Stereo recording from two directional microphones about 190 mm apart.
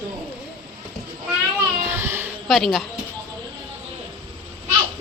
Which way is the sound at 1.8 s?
10° right (ahead or behind).